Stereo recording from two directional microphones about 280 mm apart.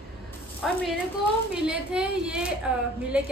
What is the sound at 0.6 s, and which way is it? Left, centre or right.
A woman's voice, centre.